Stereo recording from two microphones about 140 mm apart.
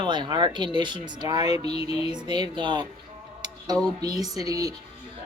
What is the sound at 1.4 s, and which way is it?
Music, 45° left (ahead or behind).